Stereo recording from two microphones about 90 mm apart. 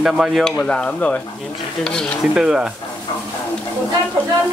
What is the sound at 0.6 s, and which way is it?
Speech, 10° left (ahead or behind).